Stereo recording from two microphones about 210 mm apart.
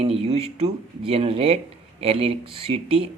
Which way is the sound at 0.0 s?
25° right (ahead or behind).